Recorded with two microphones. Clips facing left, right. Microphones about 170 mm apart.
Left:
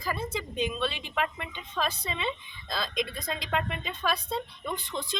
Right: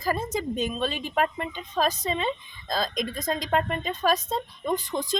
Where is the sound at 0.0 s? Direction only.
40° right (ahead or behind).